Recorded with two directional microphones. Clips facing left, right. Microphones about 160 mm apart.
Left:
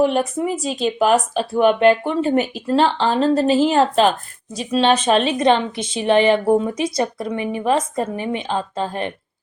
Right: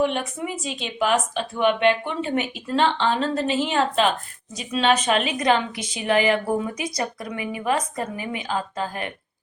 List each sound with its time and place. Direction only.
0.0 s a woman's voice: 40° left (ahead or behind)